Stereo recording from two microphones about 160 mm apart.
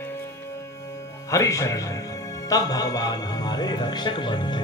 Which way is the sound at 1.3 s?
20° left (ahead or behind).